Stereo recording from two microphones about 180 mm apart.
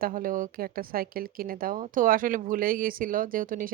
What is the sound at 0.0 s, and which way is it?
Speech, 50° right (ahead or behind).